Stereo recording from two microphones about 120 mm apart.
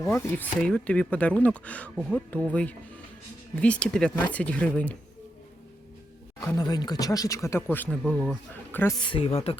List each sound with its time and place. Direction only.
0.0 s speech: 20° left (ahead or behind)
6.4 s speech: 30° left (ahead or behind); by 8.2 s 10° left (ahead or behind)
9.0 s speech: 45° left (ahead or behind)